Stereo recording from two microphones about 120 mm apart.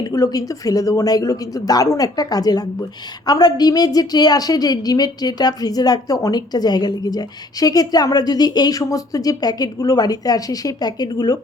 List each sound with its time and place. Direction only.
0.0 s a woman's voice: 30° left (ahead or behind)